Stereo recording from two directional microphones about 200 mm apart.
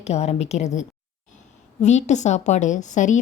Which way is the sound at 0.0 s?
30° left (ahead or behind).